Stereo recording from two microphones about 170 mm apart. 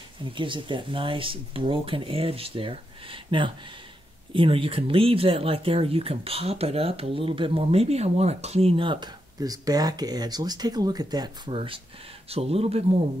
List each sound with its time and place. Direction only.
0.2 s speech: 30° right (ahead or behind)